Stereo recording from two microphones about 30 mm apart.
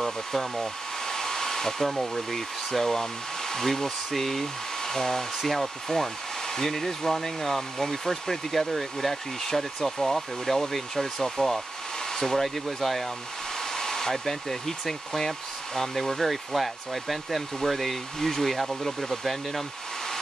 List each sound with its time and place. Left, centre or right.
0.0 s hair dryer: centre
12.6 s speech: centre
13.7 s hair dryer: centre
18.9 s speech: centre